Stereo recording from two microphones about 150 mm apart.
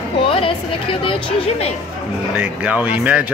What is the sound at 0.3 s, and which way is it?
Speech, 35° left (ahead or behind).